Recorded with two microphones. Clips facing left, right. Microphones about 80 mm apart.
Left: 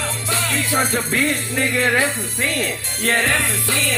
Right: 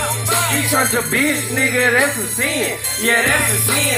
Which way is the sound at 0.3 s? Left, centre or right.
Right.